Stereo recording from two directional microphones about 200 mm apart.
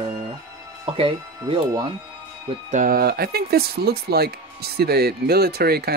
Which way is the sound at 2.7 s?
45° right (ahead or behind).